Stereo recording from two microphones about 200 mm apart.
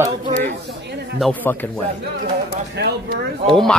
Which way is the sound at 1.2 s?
10° left (ahead or behind).